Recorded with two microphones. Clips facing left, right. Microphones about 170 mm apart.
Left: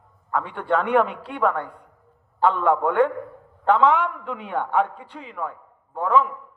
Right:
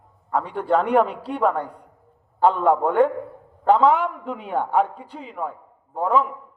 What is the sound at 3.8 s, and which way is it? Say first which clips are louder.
A man's voice: right 1 dB; 35° right (ahead or behind).